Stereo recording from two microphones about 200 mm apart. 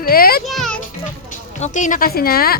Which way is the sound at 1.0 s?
40° left (ahead or behind).